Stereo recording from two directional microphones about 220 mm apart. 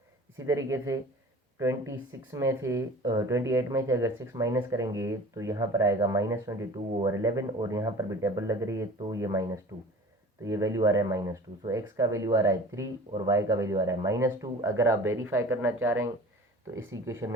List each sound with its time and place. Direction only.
0.3 s speech: 15° right (ahead or behind)
6.7 s speech: 25° right (ahead or behind)
7.1 s speech: 15° right (ahead or behind)